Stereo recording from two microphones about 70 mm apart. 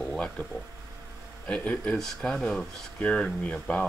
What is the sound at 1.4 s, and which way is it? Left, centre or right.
Speech, centre.